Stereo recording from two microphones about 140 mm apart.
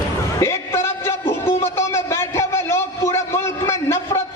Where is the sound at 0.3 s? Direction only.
20° left (ahead or behind).